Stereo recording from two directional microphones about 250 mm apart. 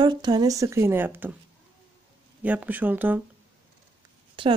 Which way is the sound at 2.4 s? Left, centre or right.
Centre.